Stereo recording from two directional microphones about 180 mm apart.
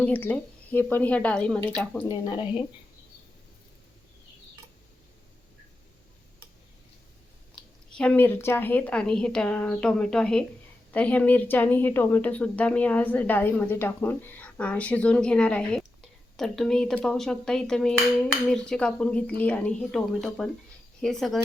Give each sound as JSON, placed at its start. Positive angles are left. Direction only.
{"t": 0.0, "sound": "a woman's voice", "side_deg": 10}
{"t": 7.9, "sound": "a woman's voice", "side_deg": 5}